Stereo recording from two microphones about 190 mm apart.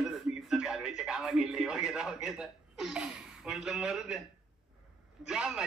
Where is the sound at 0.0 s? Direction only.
Centre (ahead or behind).